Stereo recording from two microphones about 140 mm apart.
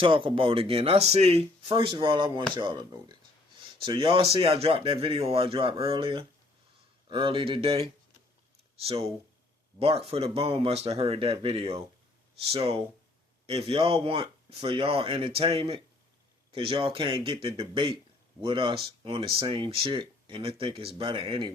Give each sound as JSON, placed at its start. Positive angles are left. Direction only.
{"t": 0.0, "sound": "speech", "side_deg": -40}